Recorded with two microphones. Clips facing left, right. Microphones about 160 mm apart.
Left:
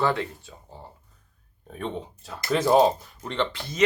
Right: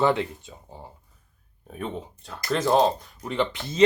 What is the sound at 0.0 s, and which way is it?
Speech, 20° right (ahead or behind).